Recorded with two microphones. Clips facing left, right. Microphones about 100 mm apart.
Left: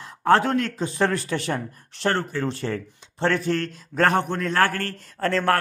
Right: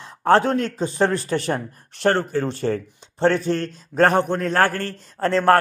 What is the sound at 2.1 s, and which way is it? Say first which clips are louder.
Speech: right 4 dB; 35° right (ahead or behind).